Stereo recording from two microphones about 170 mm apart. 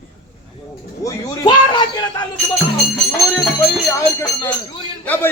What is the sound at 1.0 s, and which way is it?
A man's voice, 30° left (ahead or behind).